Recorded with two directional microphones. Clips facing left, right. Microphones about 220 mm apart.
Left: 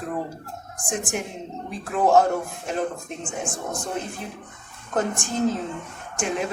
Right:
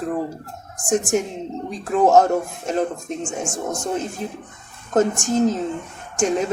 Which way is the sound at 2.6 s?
40° right (ahead or behind).